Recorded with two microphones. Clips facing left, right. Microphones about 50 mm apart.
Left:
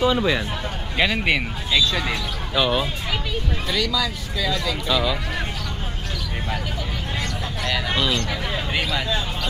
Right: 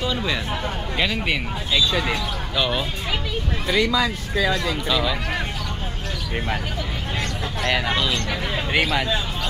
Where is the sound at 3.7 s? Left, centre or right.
Right.